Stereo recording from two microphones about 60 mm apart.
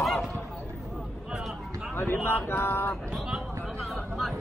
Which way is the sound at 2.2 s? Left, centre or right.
Left.